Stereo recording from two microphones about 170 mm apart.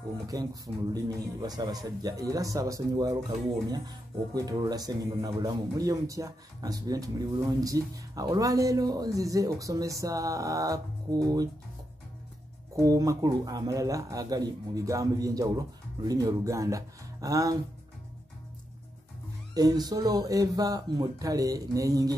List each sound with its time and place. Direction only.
0.3 s speech: 20° right (ahead or behind)
12.8 s speech: 20° right (ahead or behind)
19.5 s speech: 20° right (ahead or behind)